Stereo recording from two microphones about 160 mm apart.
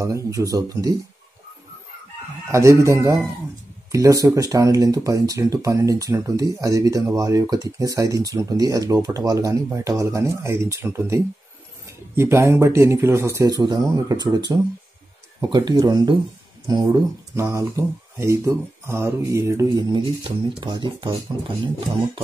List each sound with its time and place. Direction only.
0.0 s speech: 20° right (ahead or behind)
2.5 s speech: 20° right (ahead or behind)
15.4 s speech: 25° right (ahead or behind)
19.9 s speech: 30° right (ahead or behind)